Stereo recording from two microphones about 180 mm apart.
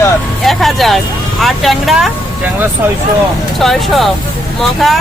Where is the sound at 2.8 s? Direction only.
15° right (ahead or behind).